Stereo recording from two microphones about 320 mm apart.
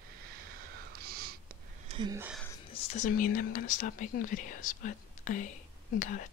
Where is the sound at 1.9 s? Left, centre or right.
Centre.